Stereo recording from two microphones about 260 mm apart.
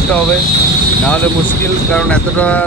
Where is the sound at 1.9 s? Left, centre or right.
Centre.